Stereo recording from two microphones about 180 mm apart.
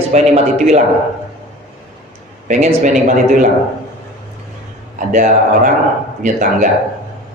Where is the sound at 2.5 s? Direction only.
45° right (ahead or behind).